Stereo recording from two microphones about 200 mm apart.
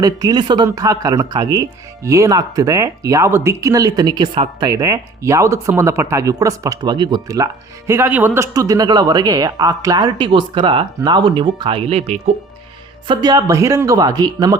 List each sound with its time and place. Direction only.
0.0 s speech: 20° right (ahead or behind)
13.1 s speech: 20° right (ahead or behind)